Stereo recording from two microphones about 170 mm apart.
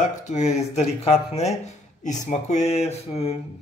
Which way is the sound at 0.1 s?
45° left (ahead or behind).